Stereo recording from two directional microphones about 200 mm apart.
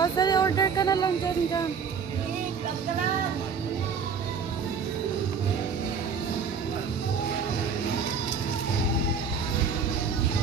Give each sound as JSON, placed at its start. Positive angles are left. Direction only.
{"t": 0.0, "sound": "speech", "side_deg": 20}